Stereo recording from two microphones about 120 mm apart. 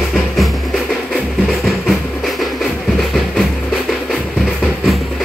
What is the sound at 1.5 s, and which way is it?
Music, centre (ahead or behind).